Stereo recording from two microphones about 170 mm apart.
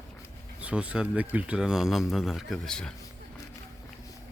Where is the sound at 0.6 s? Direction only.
5° right (ahead or behind).